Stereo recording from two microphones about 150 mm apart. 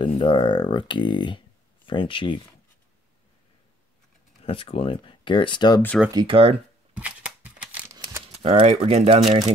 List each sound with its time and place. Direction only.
0.0 s speech: 35° left (ahead or behind)
4.4 s speech: 40° left (ahead or behind)
6.1 s speech: 35° right (ahead or behind)
6.9 s shuffling cards: 10° right (ahead or behind)
8.4 s speech: 45° right (ahead or behind)